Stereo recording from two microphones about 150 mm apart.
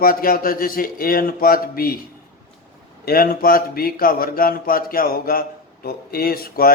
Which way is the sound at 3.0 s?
80° left.